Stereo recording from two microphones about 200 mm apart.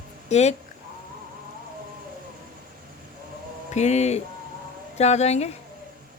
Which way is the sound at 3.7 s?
35° left (ahead or behind).